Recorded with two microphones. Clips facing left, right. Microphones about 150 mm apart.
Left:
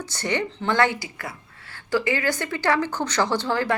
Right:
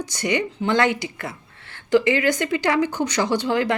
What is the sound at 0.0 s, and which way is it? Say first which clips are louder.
Speech: right 3 dB; 15° right (ahead or behind).